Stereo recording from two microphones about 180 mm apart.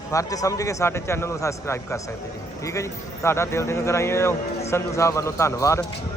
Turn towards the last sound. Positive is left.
turn(degrees=15)  # may be behind; listen again after turning